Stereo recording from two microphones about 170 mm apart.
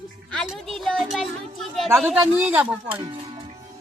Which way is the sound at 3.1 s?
35° right (ahead or behind).